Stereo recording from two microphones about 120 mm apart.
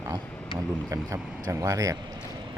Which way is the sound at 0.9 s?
25° right (ahead or behind).